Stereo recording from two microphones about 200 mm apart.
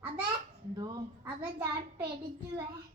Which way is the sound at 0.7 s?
20° right (ahead or behind).